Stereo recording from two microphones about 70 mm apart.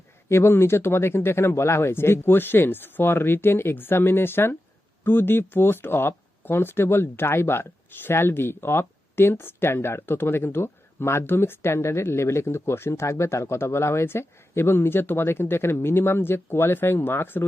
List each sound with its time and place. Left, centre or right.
0.3 s speech: left